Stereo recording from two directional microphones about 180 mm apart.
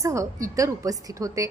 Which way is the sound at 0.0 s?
15° right (ahead or behind).